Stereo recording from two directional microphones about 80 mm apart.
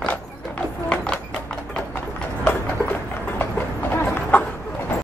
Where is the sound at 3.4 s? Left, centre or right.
Left.